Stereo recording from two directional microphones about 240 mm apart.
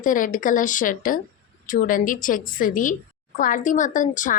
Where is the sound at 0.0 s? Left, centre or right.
Left.